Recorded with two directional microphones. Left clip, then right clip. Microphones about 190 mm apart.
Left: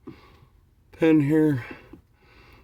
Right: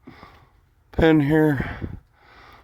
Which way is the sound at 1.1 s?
25° right (ahead or behind).